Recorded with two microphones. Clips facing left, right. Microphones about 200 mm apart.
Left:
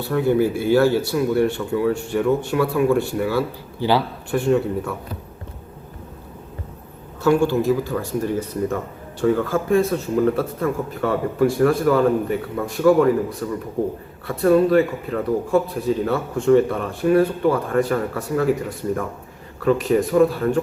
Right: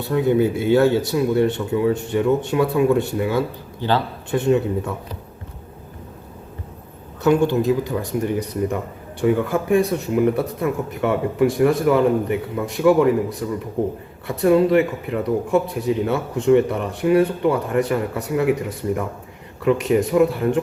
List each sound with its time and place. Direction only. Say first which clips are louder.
0.0 s speech: right 1 dB; 20° right (ahead or behind)
3.8 s a man's voice: left 2 dB; 10° left (ahead or behind)
4.3 s speech: right 1 dB; 20° right (ahead or behind)
7.2 s speech: even; 20° right (ahead or behind)
19.6 s speech: even; 20° right (ahead or behind)